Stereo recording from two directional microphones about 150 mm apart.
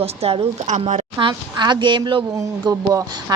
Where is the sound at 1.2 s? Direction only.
30° right (ahead or behind).